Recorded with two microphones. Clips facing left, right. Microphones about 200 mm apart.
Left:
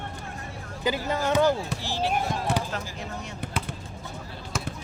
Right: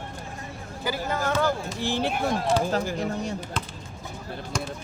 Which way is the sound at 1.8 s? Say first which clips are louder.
Right 2 dB; 55° right (ahead or behind).